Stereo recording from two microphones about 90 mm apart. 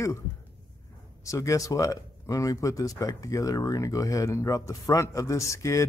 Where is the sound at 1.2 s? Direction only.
35° left (ahead or behind).